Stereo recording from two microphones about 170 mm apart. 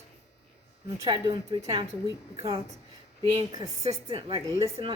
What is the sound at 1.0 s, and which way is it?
Speech, 30° right (ahead or behind).